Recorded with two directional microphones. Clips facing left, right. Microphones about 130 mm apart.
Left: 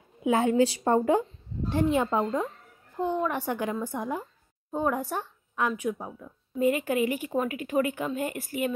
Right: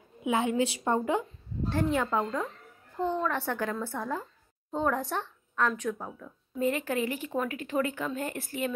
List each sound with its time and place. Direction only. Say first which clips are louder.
0.2 s a woman's voice: left 4 dB; 35° left (ahead or behind)
1.7 s speech: left 3 dB; 15° left (ahead or behind)